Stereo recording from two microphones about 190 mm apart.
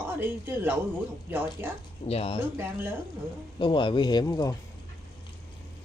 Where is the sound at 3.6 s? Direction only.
25° left (ahead or behind).